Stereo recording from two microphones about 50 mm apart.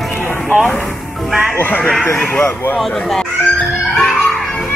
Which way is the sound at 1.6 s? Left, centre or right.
Left.